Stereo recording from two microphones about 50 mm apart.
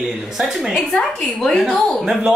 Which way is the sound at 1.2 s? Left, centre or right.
Centre.